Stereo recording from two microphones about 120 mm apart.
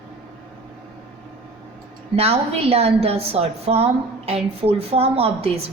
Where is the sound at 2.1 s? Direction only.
55° right (ahead or behind).